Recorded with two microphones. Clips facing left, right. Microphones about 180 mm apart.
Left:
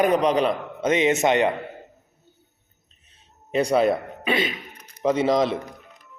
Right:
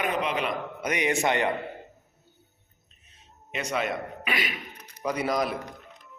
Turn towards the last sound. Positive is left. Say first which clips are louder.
# left 7 dB
turn(degrees=25)  # may be behind; listen again after turning